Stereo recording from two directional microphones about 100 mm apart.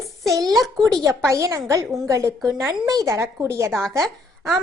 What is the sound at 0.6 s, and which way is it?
Speech, 5° left (ahead or behind).